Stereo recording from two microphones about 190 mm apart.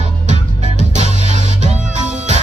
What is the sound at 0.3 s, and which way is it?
Music, 40° right (ahead or behind).